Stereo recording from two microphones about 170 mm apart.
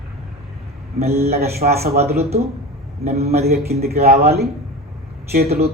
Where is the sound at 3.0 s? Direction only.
40° right (ahead or behind).